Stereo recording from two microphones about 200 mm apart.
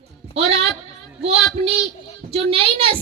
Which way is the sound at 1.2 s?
30° right (ahead or behind).